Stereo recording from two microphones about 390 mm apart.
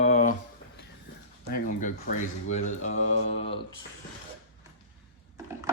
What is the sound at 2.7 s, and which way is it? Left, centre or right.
Mantra, centre.